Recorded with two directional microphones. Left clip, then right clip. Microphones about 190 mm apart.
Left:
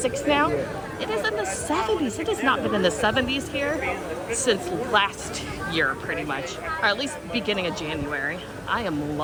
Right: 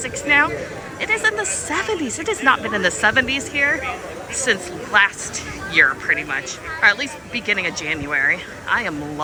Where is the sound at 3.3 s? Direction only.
10° left (ahead or behind).